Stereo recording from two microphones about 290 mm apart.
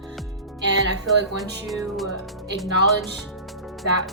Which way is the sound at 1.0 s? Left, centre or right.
Centre.